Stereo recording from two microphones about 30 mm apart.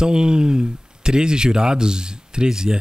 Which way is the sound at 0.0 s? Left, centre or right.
Right.